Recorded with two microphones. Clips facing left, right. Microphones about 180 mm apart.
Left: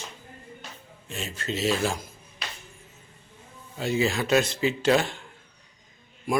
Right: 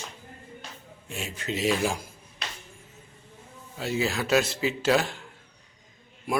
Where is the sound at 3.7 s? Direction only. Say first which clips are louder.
Left 3 dB; 5° right (ahead or behind).